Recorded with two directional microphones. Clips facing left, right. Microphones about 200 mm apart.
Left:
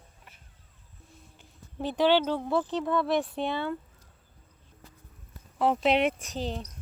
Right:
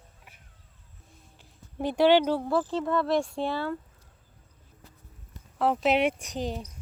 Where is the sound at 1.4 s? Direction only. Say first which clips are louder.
Right 3 dB; 10° right (ahead or behind).